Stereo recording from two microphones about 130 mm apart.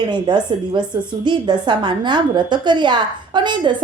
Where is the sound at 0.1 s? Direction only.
35° right (ahead or behind).